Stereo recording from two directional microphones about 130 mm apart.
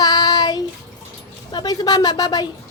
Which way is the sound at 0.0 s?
30° left (ahead or behind).